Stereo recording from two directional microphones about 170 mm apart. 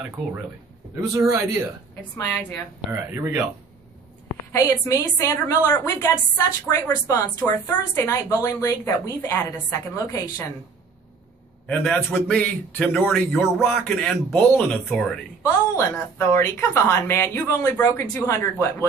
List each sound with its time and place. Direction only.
2.0 s a woman's voice: 10° left (ahead or behind)
3.1 s speech: 10° right (ahead or behind)
4.5 s a woman's voice: 20° left (ahead or behind)
11.6 s a woman's voice: 5° left (ahead or behind)